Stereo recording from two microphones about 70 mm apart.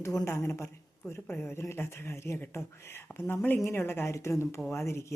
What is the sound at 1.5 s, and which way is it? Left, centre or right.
Speech, left.